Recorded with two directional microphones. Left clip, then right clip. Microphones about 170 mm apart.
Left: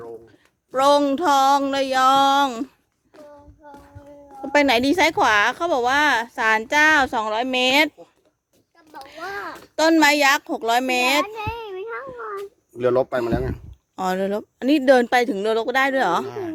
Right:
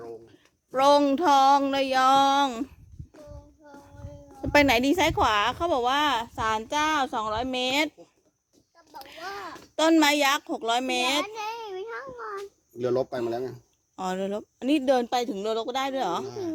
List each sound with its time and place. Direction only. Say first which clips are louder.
0.3 s a woman's voice: left 4 dB; centre (ahead or behind)
4.4 s a sound: left 2 dB; 10° right (ahead or behind)
4.6 s a woman's voice: left 5 dB; 5° left (ahead or behind)
7.6 s speech: left 9 dB; 30° left (ahead or behind)
9.0 s a sound: left 5 dB; centre (ahead or behind)
9.2 s a sound: left 7 dB; 55° left (ahead or behind)
9.7 s a woman's voice: left 5 dB; 10° left (ahead or behind)
11.3 s child singing: left 4 dB; 10° right (ahead or behind)
12.7 s speech: left 7 dB; 45° left (ahead or behind)
13.9 s speech: left 7 dB; 25° left (ahead or behind)